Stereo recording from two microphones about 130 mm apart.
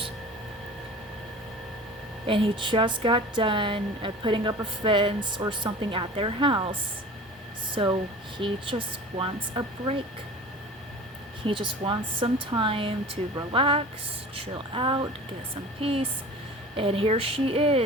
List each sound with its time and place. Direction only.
2.2 s a woman's voice: 40° right (ahead or behind)
8.4 s a woman's voice: 40° right (ahead or behind)
11.4 s a woman's voice: 40° right (ahead or behind)